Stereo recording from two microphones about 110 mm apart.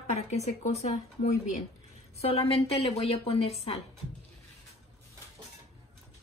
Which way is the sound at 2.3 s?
60° left (ahead or behind).